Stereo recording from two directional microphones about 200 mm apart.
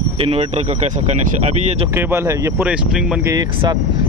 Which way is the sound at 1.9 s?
10° right (ahead or behind).